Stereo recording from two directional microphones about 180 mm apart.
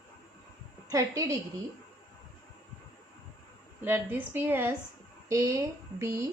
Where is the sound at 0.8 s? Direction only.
15° right (ahead or behind).